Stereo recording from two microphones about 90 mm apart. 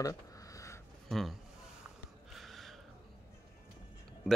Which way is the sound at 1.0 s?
5° left (ahead or behind).